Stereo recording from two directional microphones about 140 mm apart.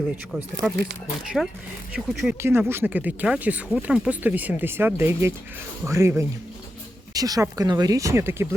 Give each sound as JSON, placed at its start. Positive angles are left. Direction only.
{"t": 0.3, "sound": "speech", "side_deg": -5}
{"t": 2.4, "sound": "speech", "side_deg": -15}